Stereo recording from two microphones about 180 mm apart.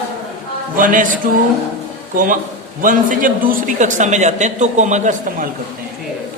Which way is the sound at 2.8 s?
45° right (ahead or behind).